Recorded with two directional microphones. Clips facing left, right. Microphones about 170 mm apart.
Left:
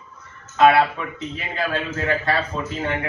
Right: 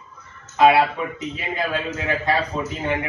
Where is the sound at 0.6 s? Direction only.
15° right (ahead or behind).